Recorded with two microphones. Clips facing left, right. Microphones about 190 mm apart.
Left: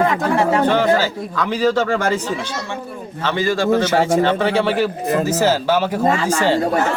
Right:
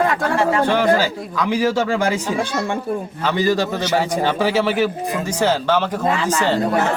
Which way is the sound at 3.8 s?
50° left (ahead or behind).